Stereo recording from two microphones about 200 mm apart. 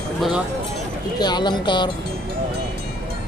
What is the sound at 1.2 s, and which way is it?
Speech, 20° left (ahead or behind).